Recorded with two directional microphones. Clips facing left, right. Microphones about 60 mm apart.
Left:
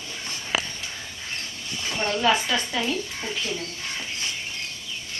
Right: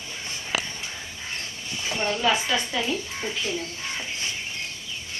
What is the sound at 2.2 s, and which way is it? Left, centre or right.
Speech, centre.